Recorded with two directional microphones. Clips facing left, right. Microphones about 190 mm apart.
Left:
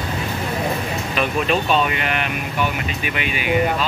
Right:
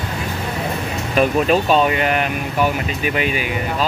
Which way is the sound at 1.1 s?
40° right (ahead or behind).